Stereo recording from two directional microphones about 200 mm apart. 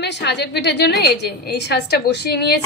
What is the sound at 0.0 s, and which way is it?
A woman's voice, 60° left (ahead or behind).